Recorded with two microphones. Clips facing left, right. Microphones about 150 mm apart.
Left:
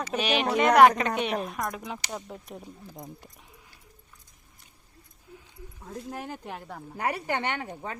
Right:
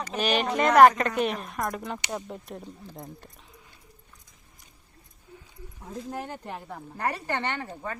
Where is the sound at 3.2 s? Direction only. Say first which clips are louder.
Right 1 dB; 10° left (ahead or behind).